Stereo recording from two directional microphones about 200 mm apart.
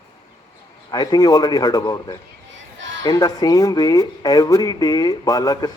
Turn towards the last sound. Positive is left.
turn(degrees=20)  # may be behind; listen again after turning